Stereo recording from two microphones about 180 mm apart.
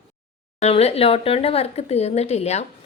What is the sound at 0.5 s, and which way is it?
Speech, 35° left (ahead or behind).